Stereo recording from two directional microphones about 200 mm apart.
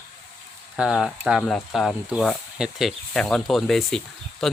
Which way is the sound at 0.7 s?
Centre (ahead or behind).